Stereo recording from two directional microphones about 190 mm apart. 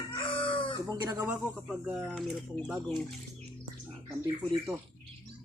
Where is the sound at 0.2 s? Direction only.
25° left (ahead or behind).